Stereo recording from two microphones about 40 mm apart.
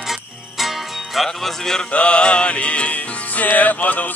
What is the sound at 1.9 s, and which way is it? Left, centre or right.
Music, left.